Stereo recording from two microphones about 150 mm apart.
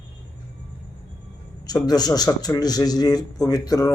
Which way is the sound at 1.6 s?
25° left (ahead or behind).